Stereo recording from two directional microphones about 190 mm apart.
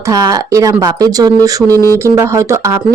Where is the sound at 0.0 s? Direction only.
20° right (ahead or behind).